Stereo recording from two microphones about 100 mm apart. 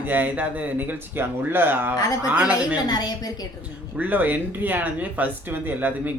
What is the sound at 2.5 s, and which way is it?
Speech, 40° left (ahead or behind).